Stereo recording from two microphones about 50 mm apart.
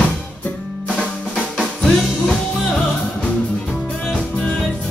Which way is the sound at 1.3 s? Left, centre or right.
Centre.